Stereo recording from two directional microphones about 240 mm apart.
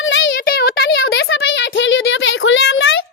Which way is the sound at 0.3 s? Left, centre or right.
Left.